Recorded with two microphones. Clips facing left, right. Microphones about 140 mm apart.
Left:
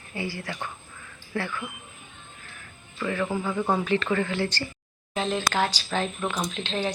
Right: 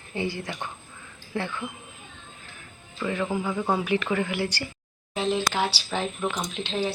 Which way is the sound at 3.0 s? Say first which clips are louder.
Even; 15° right (ahead or behind).